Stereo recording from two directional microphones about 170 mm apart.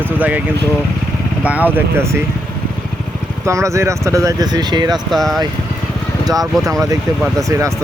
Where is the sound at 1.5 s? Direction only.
10° right (ahead or behind).